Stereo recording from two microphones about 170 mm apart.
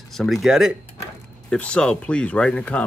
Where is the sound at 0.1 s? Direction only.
Centre (ahead or behind).